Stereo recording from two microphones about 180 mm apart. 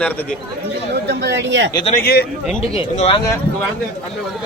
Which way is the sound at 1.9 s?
60° left (ahead or behind).